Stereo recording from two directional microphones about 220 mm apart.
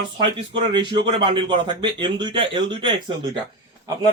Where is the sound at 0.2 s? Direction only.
20° right (ahead or behind).